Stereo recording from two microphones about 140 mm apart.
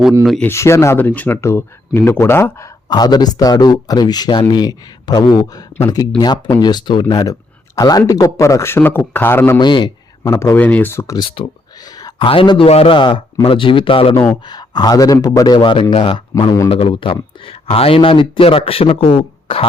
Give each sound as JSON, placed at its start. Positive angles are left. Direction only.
{"t": 0.4, "sound": "a man's voice", "side_deg": 20}
{"t": 9.6, "sound": "a man's voice", "side_deg": 35}
{"t": 10.4, "sound": "speech", "side_deg": 15}
{"t": 11.9, "sound": "a sound", "side_deg": 30}
{"t": 12.3, "sound": "a man's voice", "side_deg": 40}